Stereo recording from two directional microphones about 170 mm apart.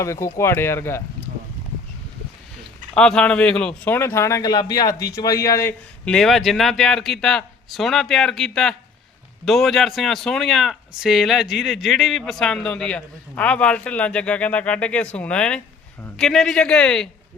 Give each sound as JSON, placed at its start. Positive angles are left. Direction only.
{"t": 0.0, "sound": "speech", "side_deg": 15}
{"t": 2.9, "sound": "speech", "side_deg": 5}
{"t": 6.1, "sound": "speech", "side_deg": 0}